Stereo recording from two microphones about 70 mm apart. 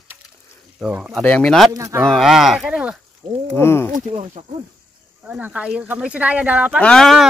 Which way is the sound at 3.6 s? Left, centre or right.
Left.